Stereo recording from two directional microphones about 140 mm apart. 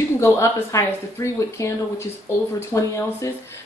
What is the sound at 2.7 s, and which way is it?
Speech, 20° left (ahead or behind).